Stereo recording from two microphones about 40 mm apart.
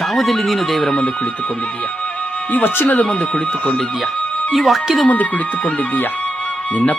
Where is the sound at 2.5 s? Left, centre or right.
Left.